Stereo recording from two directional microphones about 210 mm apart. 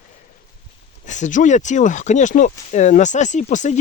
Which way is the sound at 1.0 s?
35° left (ahead or behind).